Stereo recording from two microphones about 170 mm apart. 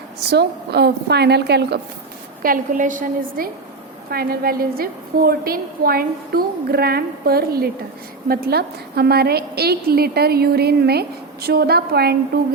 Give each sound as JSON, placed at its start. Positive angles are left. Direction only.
{"t": 0.3, "sound": "a woman's voice", "side_deg": -75}
{"t": 2.4, "sound": "a woman's voice", "side_deg": -50}